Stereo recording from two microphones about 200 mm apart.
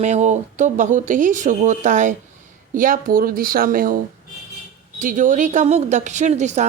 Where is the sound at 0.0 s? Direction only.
35° right (ahead or behind).